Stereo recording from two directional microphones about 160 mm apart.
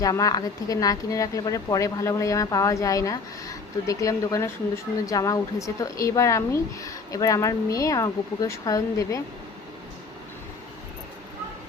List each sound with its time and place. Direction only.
0.0 s speech: 20° left (ahead or behind)